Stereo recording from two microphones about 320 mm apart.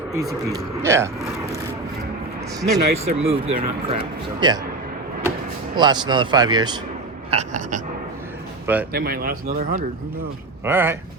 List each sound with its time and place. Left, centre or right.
0.3 s speech: centre
2.6 s a man's voice: centre
5.7 s a man's voice: centre
8.6 s speech: centre
8.9 s a man's voice: right
10.6 s speech: centre